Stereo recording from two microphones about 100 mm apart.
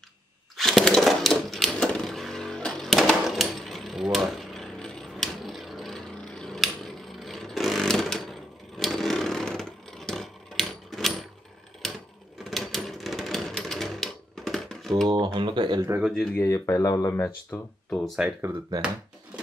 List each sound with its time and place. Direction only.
0.6 s a sound: centre (ahead or behind)
12.4 s sewing machine: centre (ahead or behind)
15.0 s speech: 45° right (ahead or behind)
16.1 s speech: 5° left (ahead or behind)
16.3 s speech: 30° left (ahead or behind)
17.5 s speech: 15° left (ahead or behind)
19.3 s a sound: 15° right (ahead or behind)